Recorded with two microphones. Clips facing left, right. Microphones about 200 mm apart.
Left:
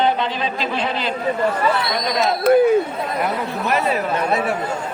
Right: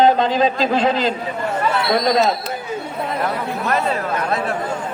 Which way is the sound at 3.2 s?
15° left (ahead or behind).